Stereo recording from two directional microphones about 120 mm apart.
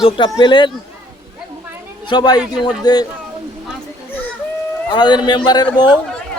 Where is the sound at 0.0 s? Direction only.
40° left (ahead or behind).